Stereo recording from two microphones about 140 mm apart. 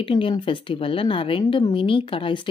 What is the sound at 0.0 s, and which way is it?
A woman's voice, 35° left (ahead or behind).